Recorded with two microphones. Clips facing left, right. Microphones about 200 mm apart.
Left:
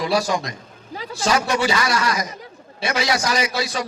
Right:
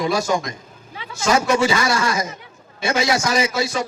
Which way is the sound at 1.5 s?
25° right (ahead or behind).